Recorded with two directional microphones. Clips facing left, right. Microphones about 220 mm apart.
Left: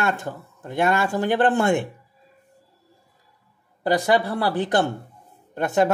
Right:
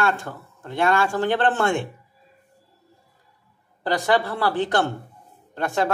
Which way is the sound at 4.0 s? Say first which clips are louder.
Right 2 dB; 15° left (ahead or behind).